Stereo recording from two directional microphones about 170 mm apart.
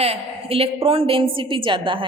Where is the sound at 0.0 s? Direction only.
35° right (ahead or behind).